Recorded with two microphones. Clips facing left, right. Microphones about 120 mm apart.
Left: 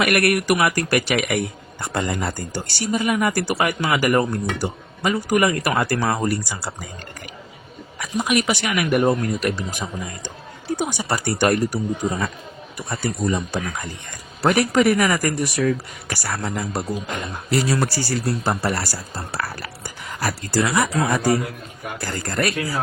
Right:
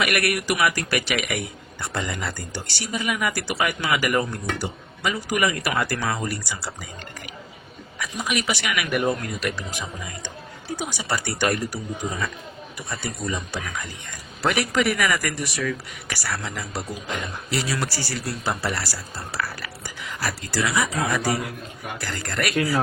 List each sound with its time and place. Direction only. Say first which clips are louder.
0.0 s a man's voice: left 5 dB; 45° left (ahead or behind)
7.9 s a man's voice: left 6 dB; 50° left (ahead or behind)
10.8 s a man's voice: left 3 dB; 50° left (ahead or behind)
12.9 s a man's voice: left 6 dB; 45° left (ahead or behind)
22.0 s speech: left 4 dB; 40° left (ahead or behind)